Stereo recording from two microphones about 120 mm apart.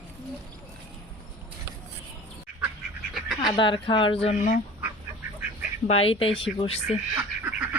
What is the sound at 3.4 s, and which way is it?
Speech, 40° left (ahead or behind).